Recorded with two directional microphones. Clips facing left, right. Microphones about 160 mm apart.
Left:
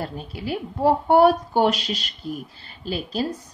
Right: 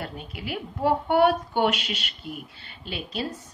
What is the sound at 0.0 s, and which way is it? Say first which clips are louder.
Speech: left 5 dB; 35° left (ahead or behind).